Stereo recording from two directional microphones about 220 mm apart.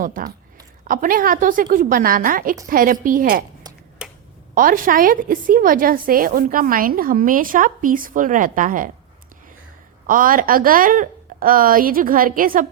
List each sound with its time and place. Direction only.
0.0 s a woman's voice: 40° right (ahead or behind)
4.0 s a sound: 5° right (ahead or behind)
4.5 s a woman's voice: 40° right (ahead or behind)
10.1 s a woman's voice: 40° right (ahead or behind)